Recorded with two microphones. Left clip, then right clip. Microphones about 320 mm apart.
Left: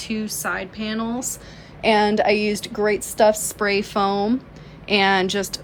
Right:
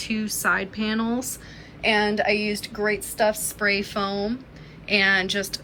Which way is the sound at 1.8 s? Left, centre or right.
Left.